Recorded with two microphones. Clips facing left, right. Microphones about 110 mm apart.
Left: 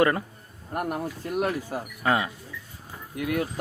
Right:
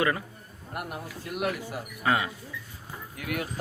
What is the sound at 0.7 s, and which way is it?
Speech, 45° left (ahead or behind).